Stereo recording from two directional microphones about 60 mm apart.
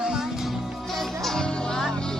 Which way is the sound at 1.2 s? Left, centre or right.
Centre.